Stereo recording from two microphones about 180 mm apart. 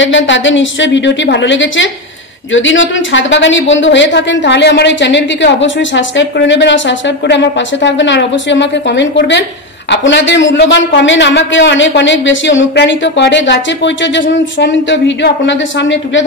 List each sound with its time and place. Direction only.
0.0 s a man's voice: 90° left